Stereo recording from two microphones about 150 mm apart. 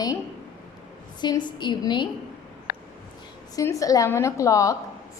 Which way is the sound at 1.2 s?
30° left (ahead or behind).